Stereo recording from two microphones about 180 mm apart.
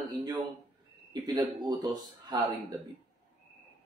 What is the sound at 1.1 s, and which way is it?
A man's voice, 20° right (ahead or behind).